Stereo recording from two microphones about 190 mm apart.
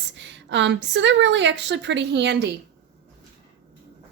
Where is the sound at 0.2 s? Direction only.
70° right (ahead or behind).